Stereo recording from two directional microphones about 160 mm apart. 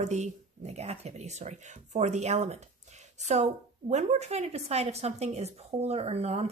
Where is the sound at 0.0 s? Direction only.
45° right (ahead or behind).